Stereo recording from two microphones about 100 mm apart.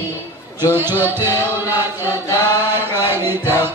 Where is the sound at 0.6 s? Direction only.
20° right (ahead or behind).